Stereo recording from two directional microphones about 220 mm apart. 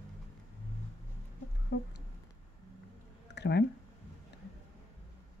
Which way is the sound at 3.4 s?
50° left (ahead or behind).